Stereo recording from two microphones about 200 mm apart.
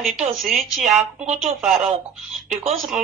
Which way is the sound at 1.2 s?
35° right (ahead or behind).